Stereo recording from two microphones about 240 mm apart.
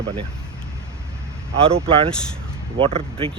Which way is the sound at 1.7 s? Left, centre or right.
Right.